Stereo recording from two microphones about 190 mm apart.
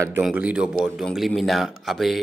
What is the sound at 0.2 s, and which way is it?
A man's voice, 5° right (ahead or behind).